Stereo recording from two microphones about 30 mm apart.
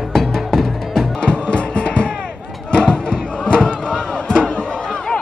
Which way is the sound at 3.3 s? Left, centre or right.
Left.